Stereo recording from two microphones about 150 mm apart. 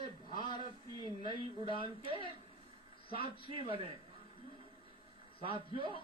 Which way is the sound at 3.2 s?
35° left (ahead or behind).